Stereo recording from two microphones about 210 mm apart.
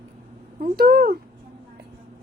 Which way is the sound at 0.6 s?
45° right (ahead or behind).